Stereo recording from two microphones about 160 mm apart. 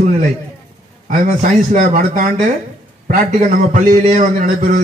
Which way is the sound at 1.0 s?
55° right (ahead or behind).